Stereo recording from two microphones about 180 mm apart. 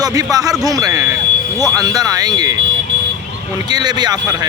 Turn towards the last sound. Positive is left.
turn(degrees=-20)  # may be behind; listen again after turning